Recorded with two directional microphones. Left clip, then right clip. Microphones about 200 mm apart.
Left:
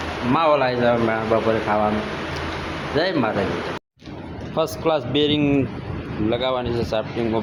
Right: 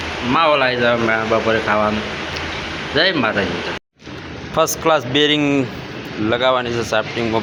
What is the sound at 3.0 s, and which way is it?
Speech, centre (ahead or behind).